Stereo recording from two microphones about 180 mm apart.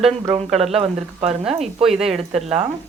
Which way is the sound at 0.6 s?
35° right (ahead or behind).